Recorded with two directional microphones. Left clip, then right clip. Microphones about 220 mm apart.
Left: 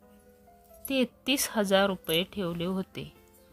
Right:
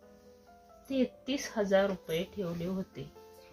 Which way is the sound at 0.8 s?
55° left (ahead or behind).